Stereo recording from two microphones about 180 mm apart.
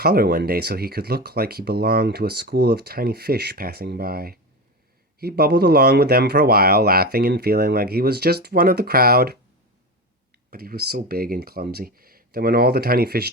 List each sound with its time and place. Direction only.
0.0 s speech: 60° right (ahead or behind)
10.5 s speech: 55° right (ahead or behind)